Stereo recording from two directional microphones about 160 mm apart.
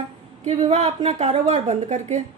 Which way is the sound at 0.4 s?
45° right (ahead or behind).